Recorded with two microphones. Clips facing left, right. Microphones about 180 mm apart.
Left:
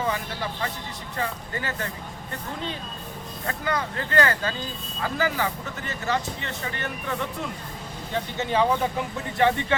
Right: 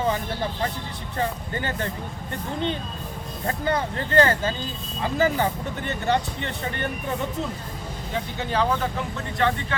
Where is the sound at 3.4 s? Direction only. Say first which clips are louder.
Right 3 dB; 30° right (ahead or behind).